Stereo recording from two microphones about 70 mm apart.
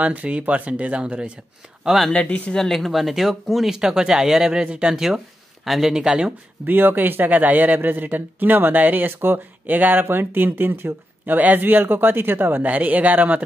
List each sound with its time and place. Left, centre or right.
0.0 s speech: centre
2.0 s speech: centre
2.5 s speech: centre
6.6 s speech: right